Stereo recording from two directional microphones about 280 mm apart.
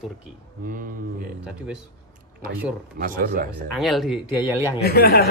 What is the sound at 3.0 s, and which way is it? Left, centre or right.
Speech, right.